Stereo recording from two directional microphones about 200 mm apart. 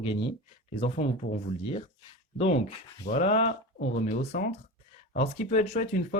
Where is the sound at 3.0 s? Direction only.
35° left (ahead or behind).